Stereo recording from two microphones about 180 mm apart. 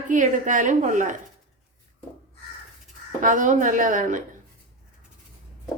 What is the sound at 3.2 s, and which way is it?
A woman's voice, 45° right (ahead or behind).